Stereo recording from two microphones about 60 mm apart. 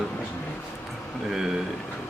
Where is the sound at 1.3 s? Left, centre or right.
Centre.